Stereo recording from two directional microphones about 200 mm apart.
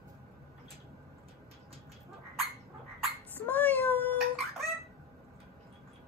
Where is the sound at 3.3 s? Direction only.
10° left (ahead or behind).